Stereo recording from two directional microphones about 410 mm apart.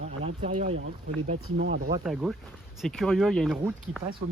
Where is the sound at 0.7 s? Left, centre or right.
Right.